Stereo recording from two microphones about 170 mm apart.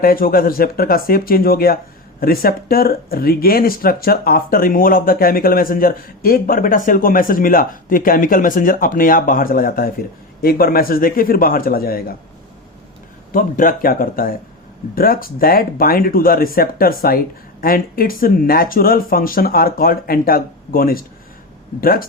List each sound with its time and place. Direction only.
0.0 s speech: 60° left (ahead or behind)
13.3 s speech: 55° left (ahead or behind)